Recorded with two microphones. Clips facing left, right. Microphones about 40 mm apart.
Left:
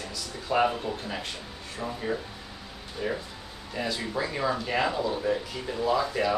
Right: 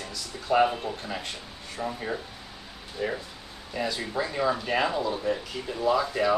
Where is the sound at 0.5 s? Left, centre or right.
Centre.